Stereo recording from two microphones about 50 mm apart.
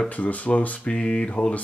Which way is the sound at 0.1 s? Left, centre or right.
Left.